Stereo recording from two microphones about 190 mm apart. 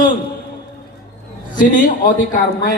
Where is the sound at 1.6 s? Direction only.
45° left (ahead or behind).